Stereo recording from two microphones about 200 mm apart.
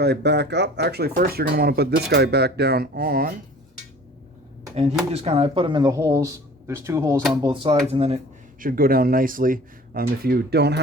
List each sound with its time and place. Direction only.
0.0 s speech: 55° right (ahead or behind)
4.7 s speech: 30° right (ahead or behind); by 7.5 s 15° right (ahead or behind)
7.5 s speech: 25° right (ahead or behind)
8.6 s speech: 45° right (ahead or behind)